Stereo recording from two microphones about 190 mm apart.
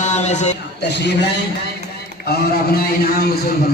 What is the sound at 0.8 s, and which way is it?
A man's voice, 60° left (ahead or behind).